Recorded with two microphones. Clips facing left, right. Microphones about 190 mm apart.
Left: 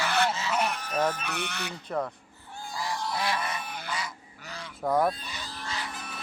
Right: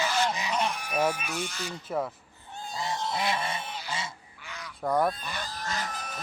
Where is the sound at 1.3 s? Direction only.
65° left (ahead or behind).